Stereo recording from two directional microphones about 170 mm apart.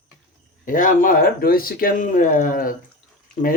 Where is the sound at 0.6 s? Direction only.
50° left (ahead or behind).